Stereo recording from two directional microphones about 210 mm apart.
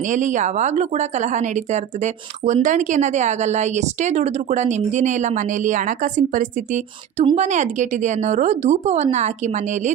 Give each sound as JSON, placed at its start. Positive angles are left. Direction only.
{"t": 0.1, "sound": "a woman's voice", "side_deg": -35}